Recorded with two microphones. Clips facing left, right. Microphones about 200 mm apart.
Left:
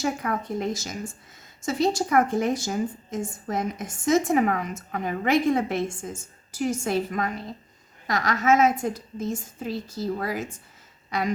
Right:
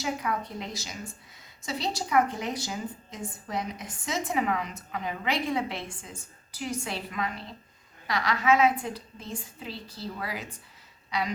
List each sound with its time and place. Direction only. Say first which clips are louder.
0.0 s a woman's voice: left 4 dB; 50° left (ahead or behind)